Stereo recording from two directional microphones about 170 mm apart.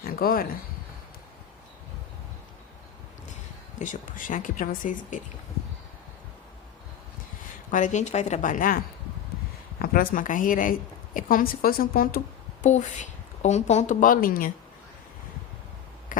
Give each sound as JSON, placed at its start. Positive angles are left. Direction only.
{"t": 0.0, "sound": "speech", "side_deg": 60}
{"t": 3.8, "sound": "a woman's voice", "side_deg": 50}
{"t": 7.7, "sound": "a woman's voice", "side_deg": 50}
{"t": 12.6, "sound": "a woman's voice", "side_deg": 45}